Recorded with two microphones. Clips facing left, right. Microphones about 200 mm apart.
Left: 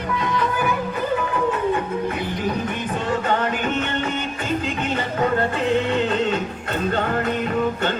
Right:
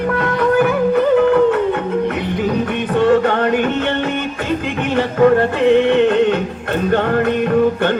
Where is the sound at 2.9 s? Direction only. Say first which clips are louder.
Right 10 dB; 65° right (ahead or behind).